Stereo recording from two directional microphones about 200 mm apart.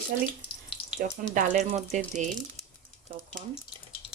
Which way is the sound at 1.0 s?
45° right (ahead or behind).